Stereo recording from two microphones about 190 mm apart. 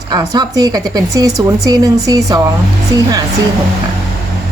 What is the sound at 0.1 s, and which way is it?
A woman's voice, 20° right (ahead or behind).